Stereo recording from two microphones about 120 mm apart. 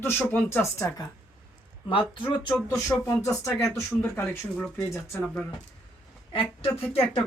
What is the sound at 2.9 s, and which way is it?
Speech, 10° left (ahead or behind).